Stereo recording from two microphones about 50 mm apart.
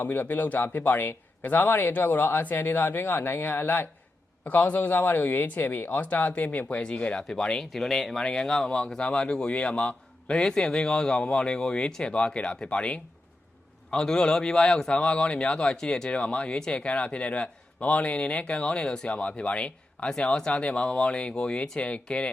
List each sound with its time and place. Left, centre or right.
0.0 s speech: left
7.2 s speech: centre
20.1 s speech: centre